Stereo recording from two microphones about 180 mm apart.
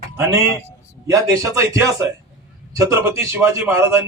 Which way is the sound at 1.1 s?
15° right (ahead or behind).